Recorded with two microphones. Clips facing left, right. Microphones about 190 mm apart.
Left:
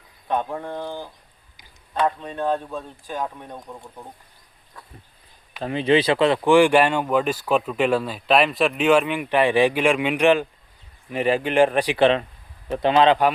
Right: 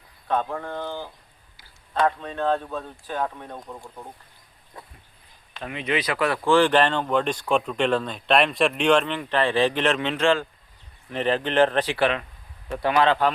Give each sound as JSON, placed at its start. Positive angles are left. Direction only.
{"t": 0.3, "sound": "speech", "side_deg": 15}
{"t": 1.5, "sound": "a sound", "side_deg": 15}
{"t": 2.0, "sound": "speech", "side_deg": 15}
{"t": 5.6, "sound": "speech", "side_deg": 30}
{"t": 11.9, "sound": "speech", "side_deg": 25}